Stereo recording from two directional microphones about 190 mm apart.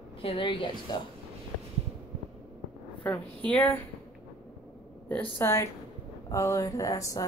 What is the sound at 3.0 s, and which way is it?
Speech, 10° left (ahead or behind).